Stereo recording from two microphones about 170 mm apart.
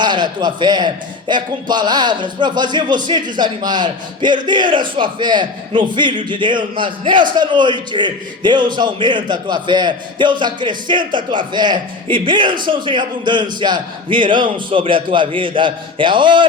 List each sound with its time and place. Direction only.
0.0 s a man's voice: 25° right (ahead or behind)